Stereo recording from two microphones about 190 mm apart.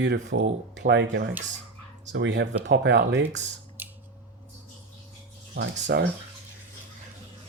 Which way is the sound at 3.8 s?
10° right (ahead or behind).